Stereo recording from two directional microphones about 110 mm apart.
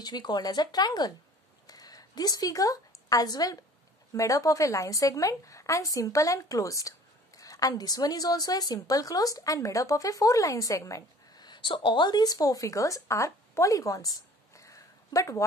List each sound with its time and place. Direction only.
0.0 s speech: 40° left (ahead or behind)
1.7 s a sound: 35° left (ahead or behind)
4.1 s a woman's voice: 30° left (ahead or behind)